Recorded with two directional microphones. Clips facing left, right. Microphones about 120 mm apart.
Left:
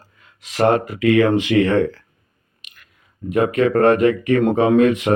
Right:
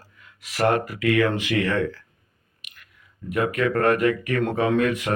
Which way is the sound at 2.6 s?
25° left (ahead or behind).